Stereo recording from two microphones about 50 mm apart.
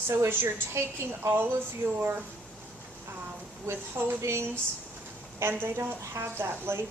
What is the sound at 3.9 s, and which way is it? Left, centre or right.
Speech, right.